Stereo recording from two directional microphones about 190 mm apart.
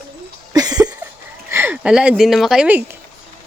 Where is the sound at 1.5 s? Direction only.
10° right (ahead or behind).